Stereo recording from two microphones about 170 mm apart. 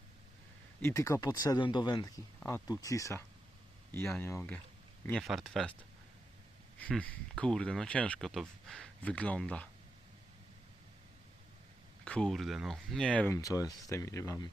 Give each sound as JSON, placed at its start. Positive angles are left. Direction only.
{"t": 0.8, "sound": "speech", "side_deg": 15}
{"t": 5.0, "sound": "speech", "side_deg": 0}
{"t": 6.7, "sound": "speech", "side_deg": 10}
{"t": 12.0, "sound": "speech", "side_deg": 5}
{"t": 13.3, "sound": "speech", "side_deg": 20}